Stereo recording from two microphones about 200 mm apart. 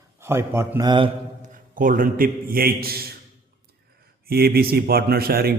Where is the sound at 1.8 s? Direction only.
45° right (ahead or behind).